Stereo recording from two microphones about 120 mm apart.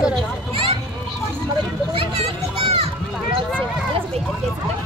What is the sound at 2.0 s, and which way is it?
Children playing, 50° right (ahead or behind).